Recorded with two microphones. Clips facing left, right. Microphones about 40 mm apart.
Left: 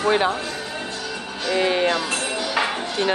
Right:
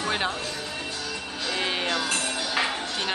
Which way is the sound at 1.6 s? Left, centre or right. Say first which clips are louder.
Left 9 dB; centre.